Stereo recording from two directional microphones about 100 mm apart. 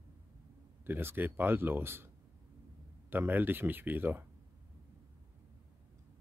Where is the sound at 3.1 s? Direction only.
20° right (ahead or behind).